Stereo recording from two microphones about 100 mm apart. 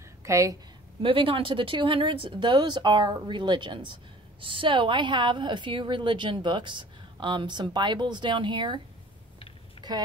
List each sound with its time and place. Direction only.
0.2 s a woman's voice: 30° right (ahead or behind)
1.0 s speech: 60° right (ahead or behind)
9.8 s boat: 65° left (ahead or behind)